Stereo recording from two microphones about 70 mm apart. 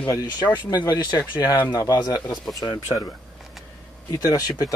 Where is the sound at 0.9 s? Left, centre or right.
Left.